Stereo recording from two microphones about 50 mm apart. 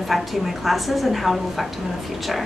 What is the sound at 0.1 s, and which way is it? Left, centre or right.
A woman's voice, centre.